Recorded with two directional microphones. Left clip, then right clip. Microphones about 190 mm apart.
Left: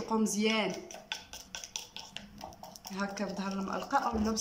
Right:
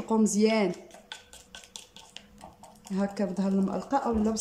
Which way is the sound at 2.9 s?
30° right (ahead or behind).